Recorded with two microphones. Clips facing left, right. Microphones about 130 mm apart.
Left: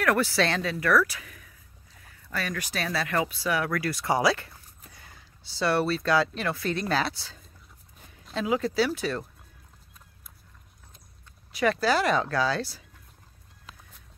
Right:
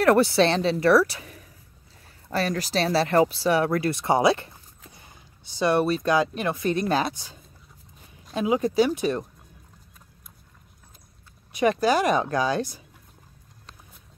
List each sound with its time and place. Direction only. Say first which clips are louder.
0.0 s a woman's voice: right 6 dB; 30° right (ahead or behind)
11.5 s speech: right 3 dB; 20° right (ahead or behind)